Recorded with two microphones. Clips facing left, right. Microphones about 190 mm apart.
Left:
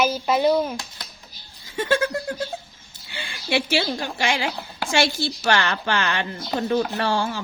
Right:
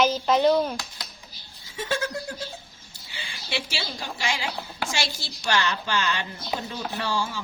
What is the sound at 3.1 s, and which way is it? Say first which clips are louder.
Speech: left 8 dB; 60° left (ahead or behind).